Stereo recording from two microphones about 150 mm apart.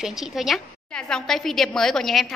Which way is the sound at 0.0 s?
Centre (ahead or behind).